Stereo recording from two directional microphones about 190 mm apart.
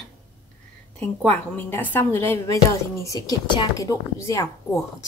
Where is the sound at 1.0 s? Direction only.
10° left (ahead or behind).